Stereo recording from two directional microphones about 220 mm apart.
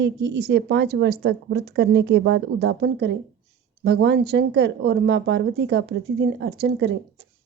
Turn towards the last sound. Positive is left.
turn(degrees=-50)  # may be behind; listen again after turning